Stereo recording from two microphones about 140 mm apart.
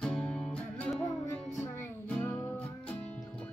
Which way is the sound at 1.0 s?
20° left (ahead or behind).